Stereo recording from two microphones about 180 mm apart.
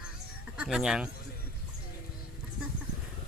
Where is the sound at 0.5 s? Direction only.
5° right (ahead or behind).